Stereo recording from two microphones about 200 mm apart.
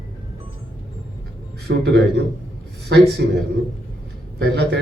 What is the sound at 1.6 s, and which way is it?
Speech, 60° right (ahead or behind).